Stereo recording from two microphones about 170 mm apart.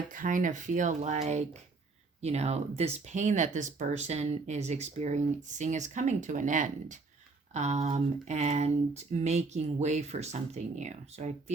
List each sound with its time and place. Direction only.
0.1 s speech: 50° right (ahead or behind)